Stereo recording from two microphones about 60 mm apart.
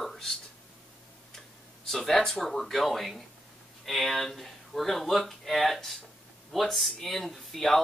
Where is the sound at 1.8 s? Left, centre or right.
Centre.